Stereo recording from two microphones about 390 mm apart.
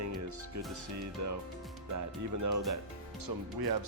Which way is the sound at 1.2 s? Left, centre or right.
Right.